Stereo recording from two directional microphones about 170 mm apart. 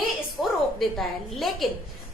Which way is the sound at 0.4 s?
Centre (ahead or behind).